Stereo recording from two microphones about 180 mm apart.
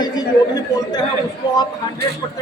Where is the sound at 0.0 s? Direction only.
20° left (ahead or behind).